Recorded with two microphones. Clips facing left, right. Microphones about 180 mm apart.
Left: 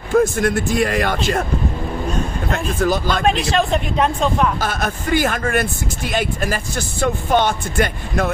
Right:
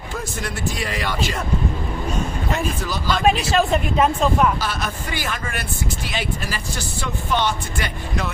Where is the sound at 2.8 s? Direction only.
50° left (ahead or behind).